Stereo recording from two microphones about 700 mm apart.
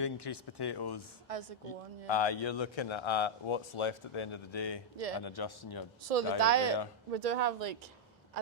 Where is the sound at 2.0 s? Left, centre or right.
Left.